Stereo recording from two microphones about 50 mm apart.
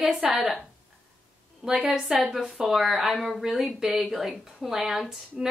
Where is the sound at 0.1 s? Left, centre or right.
Centre.